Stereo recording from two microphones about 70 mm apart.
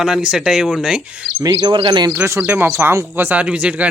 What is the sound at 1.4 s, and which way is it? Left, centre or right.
Speech, right.